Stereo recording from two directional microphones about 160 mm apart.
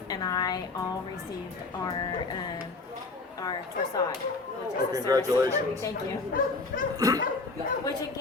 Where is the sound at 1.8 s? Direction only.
30° left (ahead or behind).